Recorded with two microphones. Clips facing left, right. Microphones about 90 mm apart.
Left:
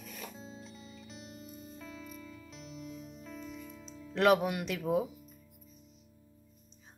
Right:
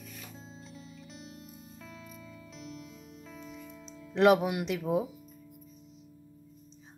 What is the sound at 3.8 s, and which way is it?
Speech, 20° right (ahead or behind).